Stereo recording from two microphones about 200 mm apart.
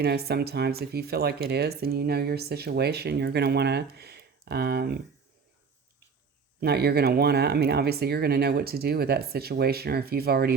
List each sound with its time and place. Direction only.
0.0 s speech: 55° right (ahead or behind)
6.6 s speech: 55° right (ahead or behind)